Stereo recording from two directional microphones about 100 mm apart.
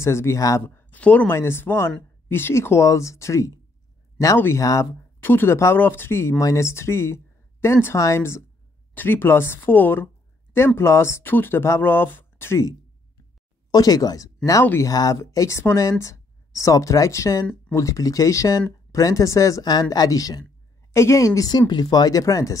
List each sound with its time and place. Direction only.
0.0 s speech: 30° left (ahead or behind)
0.7 s speech: 20° left (ahead or behind)
5.2 s speech: 20° left (ahead or behind)
13.7 s speech: 40° left (ahead or behind)